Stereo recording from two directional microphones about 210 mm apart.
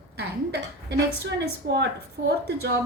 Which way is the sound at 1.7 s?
55° right (ahead or behind).